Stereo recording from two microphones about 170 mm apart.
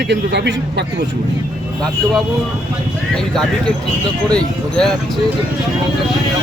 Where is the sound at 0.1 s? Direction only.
85° right.